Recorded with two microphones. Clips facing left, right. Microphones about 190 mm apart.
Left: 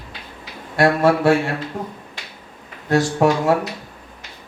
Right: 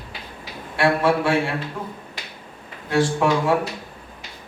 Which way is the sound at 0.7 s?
40° left (ahead or behind).